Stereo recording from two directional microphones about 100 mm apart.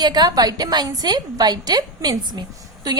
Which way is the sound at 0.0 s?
40° right (ahead or behind).